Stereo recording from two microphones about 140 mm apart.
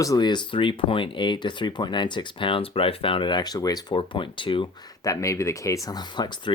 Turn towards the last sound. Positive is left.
turn(degrees=35)  # may be behind; listen again after turning